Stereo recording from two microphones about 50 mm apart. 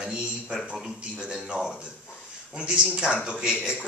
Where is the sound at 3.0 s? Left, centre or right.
Centre.